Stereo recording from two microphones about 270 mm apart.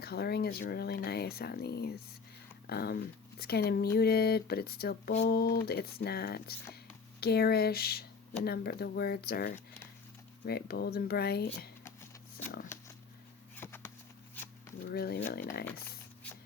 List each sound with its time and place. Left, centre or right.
0.0 s speech: left
12.7 s a sound: centre
14.9 s speech: left